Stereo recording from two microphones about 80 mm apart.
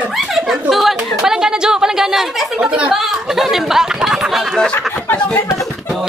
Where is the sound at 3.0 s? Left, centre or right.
Centre.